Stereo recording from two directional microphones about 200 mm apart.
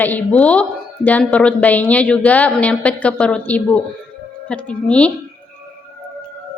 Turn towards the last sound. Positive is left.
turn(degrees=5)  # may be behind; listen again after turning